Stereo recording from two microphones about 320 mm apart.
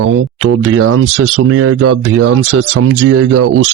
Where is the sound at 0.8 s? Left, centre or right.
Right.